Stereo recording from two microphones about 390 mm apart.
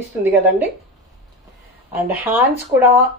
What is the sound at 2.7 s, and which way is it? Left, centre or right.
Speech, right.